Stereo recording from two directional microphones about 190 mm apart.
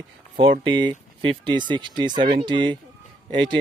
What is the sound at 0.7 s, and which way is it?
Speech, 25° right (ahead or behind).